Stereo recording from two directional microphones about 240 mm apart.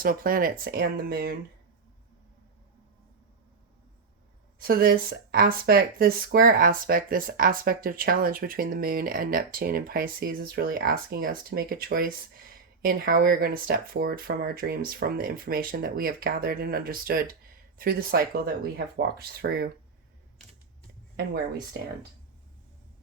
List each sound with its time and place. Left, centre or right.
0.0 s speech: right
4.6 s speech: right